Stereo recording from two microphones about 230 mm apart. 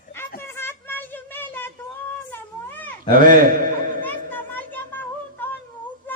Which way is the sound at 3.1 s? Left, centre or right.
Right.